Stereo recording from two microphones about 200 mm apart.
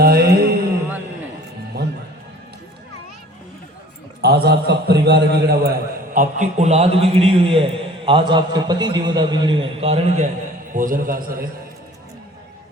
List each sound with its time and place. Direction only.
0.0 s a sound: 50° right (ahead or behind)
4.2 s a man's voice: 55° right (ahead or behind)
6.1 s a man's voice: 35° right (ahead or behind)
10.8 s a man's voice: 45° right (ahead or behind)